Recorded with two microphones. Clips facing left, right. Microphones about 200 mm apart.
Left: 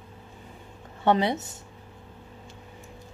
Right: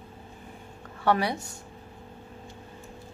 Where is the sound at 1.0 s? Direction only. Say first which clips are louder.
Left 2 dB; 20° left (ahead or behind).